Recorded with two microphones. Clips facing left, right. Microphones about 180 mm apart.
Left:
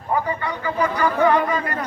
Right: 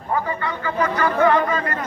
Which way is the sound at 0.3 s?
15° left (ahead or behind).